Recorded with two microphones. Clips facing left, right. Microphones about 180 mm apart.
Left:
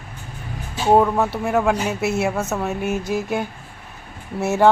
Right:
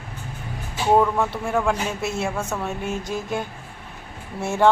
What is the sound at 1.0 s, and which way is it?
Speech, 25° left (ahead or behind).